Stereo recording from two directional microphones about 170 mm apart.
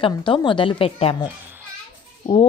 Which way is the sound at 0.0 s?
30° left (ahead or behind).